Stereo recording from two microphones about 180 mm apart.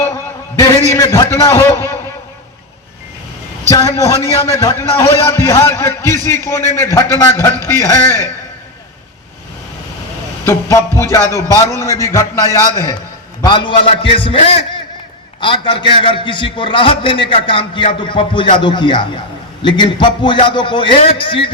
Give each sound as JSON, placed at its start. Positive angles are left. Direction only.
{"t": 0.9, "sound": "a man's voice", "side_deg": 15}
{"t": 3.7, "sound": "a man's voice", "side_deg": 20}
{"t": 10.4, "sound": "a man's voice", "side_deg": 15}